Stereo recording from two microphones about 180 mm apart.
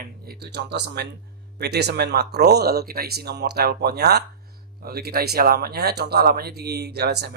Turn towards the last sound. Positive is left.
turn(degrees=-65)  # may be behind; listen again after turning